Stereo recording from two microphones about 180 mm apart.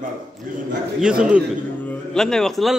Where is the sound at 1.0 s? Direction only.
5° right (ahead or behind).